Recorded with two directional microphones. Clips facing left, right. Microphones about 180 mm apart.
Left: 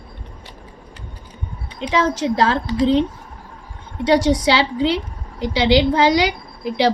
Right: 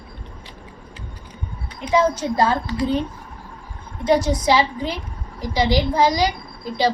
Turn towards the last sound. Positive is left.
turn(degrees=70)  # may be behind; listen again after turning